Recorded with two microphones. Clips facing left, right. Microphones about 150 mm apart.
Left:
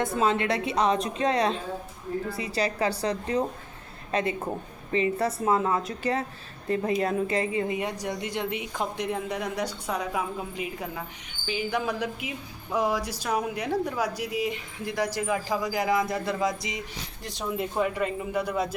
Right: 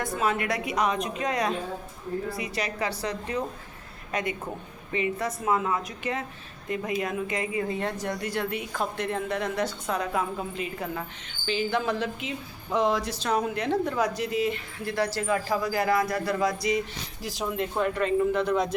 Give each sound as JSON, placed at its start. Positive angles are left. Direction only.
{"t": 0.0, "sound": "a woman's voice", "side_deg": 25}
{"t": 7.8, "sound": "speech", "side_deg": 15}
{"t": 17.2, "sound": "speech", "side_deg": 0}